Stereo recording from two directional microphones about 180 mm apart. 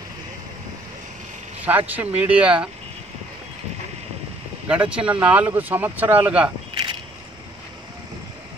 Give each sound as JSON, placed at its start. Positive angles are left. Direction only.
{"t": 1.6, "sound": "speech", "side_deg": -10}
{"t": 4.6, "sound": "speech", "side_deg": -5}